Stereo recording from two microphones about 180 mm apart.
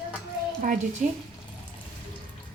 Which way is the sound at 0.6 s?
45° right (ahead or behind).